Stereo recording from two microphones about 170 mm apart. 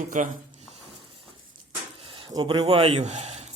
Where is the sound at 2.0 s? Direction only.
30° right (ahead or behind).